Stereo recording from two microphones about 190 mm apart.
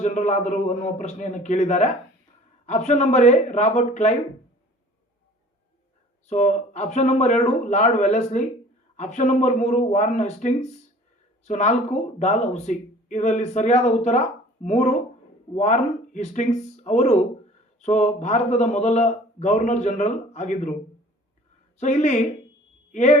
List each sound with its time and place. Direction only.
0.0 s speech: 40° left (ahead or behind)
6.2 s speech: 40° left (ahead or behind)
21.8 s speech: 40° left (ahead or behind)